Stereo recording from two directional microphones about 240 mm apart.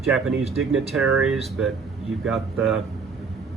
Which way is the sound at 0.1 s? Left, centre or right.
Centre.